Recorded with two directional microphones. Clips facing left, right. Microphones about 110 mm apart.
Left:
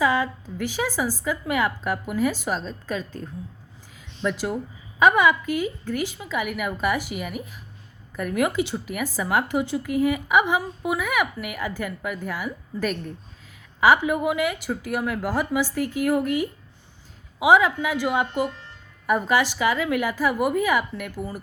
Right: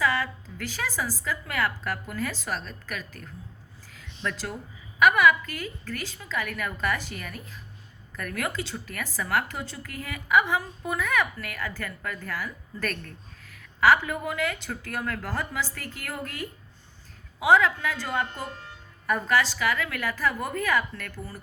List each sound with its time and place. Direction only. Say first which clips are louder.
0.0 s a woman's voice: left 5 dB; 20° left (ahead or behind)